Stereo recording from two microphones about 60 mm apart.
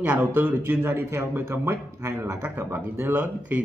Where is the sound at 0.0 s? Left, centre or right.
Right.